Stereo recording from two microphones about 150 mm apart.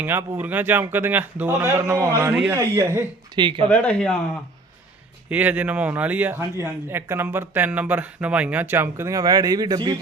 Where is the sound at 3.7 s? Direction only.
10° left (ahead or behind).